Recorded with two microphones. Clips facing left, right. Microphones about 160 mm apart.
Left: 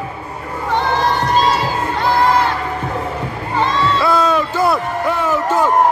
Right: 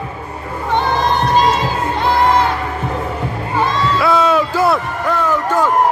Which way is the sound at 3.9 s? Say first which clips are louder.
Right 3 dB; centre (ahead or behind).